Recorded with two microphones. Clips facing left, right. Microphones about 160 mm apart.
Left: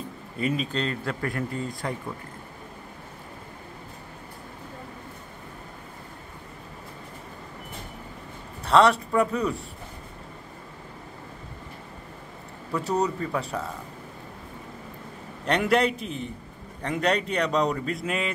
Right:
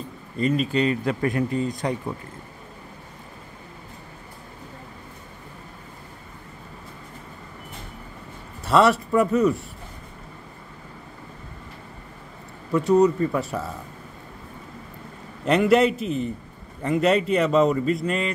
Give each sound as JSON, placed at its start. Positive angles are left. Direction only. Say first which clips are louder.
{"t": 0.4, "sound": "speech", "louder": "right 5 dB", "side_deg": 5}
{"t": 0.7, "sound": "speech", "louder": "right 7 dB", "side_deg": -15}
{"t": 8.6, "sound": "speech", "louder": "right 1 dB", "side_deg": -5}
{"t": 12.7, "sound": "speech", "louder": "right 8 dB", "side_deg": 0}
{"t": 15.4, "sound": "speech", "louder": "right 5 dB", "side_deg": 0}